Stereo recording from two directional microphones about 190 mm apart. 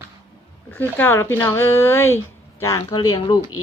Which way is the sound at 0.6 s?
10° left (ahead or behind).